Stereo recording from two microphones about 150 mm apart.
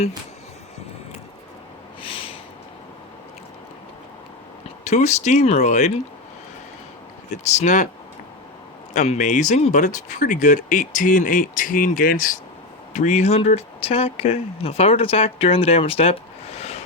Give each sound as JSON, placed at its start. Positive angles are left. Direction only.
{"t": 2.0, "sound": "a sound", "side_deg": 40}
{"t": 4.8, "sound": "speech", "side_deg": 50}
{"t": 7.4, "sound": "speech", "side_deg": 55}
{"t": 8.9, "sound": "speech", "side_deg": 55}
{"t": 12.9, "sound": "speech", "side_deg": 50}